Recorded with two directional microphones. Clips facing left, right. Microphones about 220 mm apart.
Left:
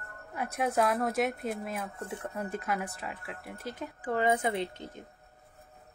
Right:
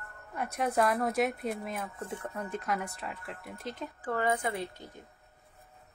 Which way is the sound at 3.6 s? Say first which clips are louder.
Even; 10° left (ahead or behind).